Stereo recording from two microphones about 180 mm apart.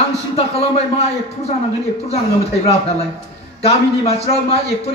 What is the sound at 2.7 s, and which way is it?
Speech, 35° left (ahead or behind).